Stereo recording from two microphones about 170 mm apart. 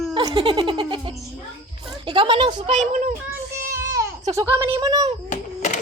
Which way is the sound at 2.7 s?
45° right (ahead or behind).